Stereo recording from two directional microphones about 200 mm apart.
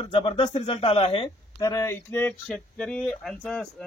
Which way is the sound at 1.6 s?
15° left (ahead or behind).